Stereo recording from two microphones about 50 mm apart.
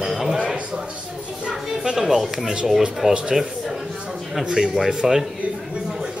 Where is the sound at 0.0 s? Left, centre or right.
Centre.